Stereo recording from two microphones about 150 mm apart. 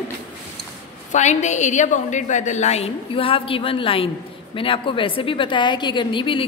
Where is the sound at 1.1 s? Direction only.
50° left (ahead or behind).